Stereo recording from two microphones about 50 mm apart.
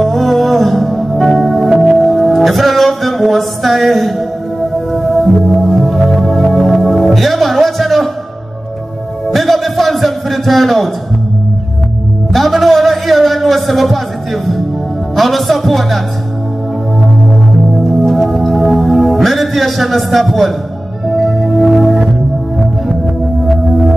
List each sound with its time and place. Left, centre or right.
0.0 s music: centre
9.3 s music: centre
12.3 s a sound: centre
15.1 s speech: centre
18.0 s organ: centre
21.1 s music: centre